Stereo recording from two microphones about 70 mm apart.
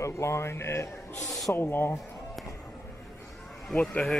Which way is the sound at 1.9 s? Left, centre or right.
Centre.